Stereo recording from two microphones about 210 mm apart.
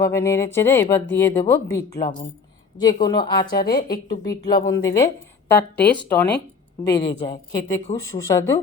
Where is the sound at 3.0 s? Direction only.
20° left (ahead or behind).